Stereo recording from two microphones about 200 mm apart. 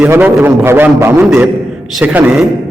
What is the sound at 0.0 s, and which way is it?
A man's voice, 10° right (ahead or behind).